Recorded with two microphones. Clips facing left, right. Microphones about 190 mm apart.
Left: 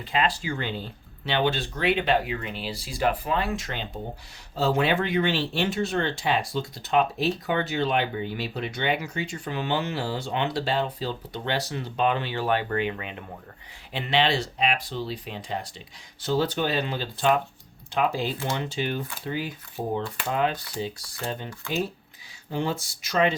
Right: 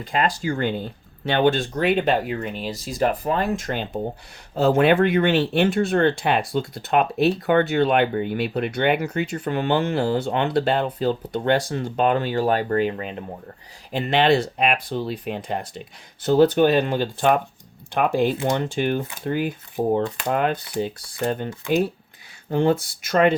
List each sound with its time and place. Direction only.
0.0 s speech: 45° right (ahead or behind)
13.9 s speech: 50° right (ahead or behind)